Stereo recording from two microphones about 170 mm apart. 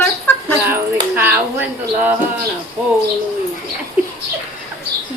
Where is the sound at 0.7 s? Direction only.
15° right (ahead or behind).